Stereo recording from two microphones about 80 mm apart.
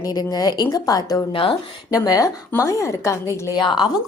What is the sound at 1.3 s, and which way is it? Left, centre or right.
Speech, left.